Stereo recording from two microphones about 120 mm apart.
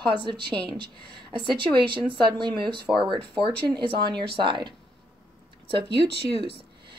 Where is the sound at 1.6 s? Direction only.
40° right (ahead or behind).